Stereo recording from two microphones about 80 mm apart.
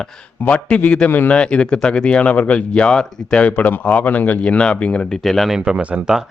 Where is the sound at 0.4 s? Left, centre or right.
Centre.